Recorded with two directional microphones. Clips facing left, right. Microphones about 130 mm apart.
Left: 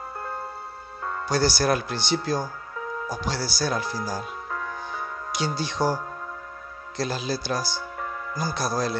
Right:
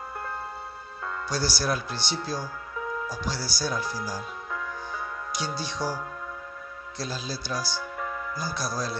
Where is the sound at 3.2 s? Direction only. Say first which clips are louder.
Left 5 dB; 70° left (ahead or behind).